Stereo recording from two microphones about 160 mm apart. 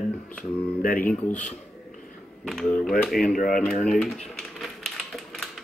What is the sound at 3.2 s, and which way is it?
Speech, 60° left (ahead or behind).